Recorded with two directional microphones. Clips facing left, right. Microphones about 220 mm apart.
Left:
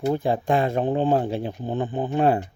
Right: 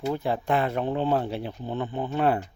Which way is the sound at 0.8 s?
45° left (ahead or behind).